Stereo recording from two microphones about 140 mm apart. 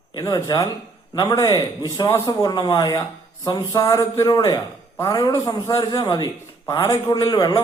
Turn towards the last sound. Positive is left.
turn(degrees=25)  # may be behind; listen again after turning